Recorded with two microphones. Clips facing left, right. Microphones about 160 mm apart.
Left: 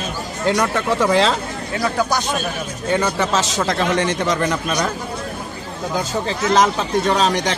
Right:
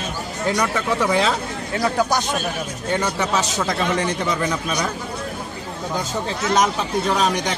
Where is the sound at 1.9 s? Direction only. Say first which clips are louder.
Even; 20° right (ahead or behind).